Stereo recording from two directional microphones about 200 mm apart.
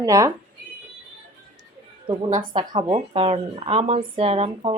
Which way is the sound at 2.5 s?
25° right (ahead or behind).